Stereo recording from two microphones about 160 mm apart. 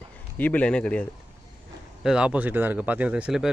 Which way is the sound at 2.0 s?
5° right (ahead or behind).